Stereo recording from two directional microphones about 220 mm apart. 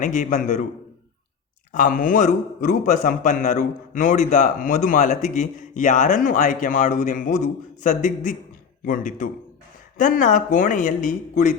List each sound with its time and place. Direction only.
0.0 s a man's voice: 35° left (ahead or behind)
1.7 s a man's voice: 35° left (ahead or behind)